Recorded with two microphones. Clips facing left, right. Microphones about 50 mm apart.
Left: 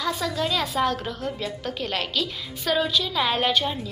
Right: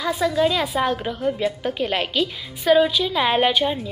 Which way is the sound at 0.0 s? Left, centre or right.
Centre.